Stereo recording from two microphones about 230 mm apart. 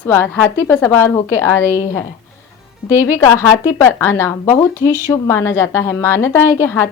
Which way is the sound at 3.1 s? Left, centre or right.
Centre.